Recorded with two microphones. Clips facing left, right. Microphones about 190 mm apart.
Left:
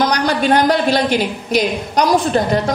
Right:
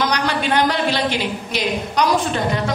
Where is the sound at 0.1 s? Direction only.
40° left (ahead or behind).